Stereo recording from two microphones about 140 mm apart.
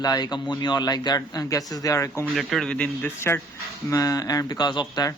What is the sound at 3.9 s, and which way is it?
Speech, 25° left (ahead or behind).